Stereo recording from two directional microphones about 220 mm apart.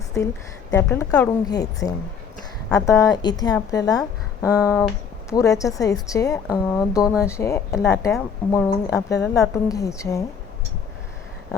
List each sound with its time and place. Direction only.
0.7 s a woman's voice: 10° left (ahead or behind)